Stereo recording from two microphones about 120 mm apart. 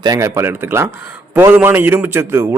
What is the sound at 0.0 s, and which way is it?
Speech, 30° right (ahead or behind).